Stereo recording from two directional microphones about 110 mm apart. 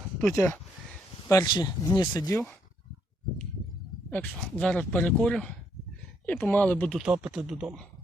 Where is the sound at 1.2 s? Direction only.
35° left (ahead or behind).